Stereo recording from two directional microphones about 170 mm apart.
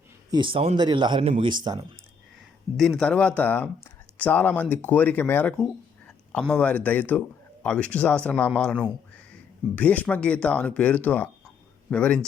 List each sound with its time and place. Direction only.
0.3 s a man's voice: 30° right (ahead or behind)
2.7 s speech: 5° left (ahead or behind)